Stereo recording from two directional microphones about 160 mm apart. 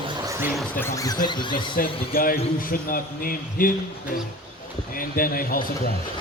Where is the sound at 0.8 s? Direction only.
20° left (ahead or behind).